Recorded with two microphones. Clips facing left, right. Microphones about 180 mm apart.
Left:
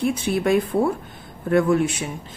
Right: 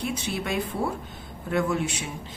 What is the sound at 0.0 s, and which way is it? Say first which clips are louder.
A woman's voice: left 9 dB; 55° left (ahead or behind).